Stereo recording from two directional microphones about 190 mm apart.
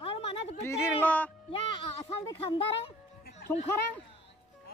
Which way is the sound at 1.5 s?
25° left (ahead or behind).